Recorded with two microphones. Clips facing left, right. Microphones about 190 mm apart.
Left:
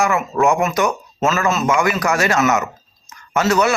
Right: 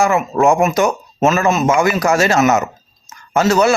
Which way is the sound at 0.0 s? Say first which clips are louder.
Right 3 dB; 25° right (ahead or behind).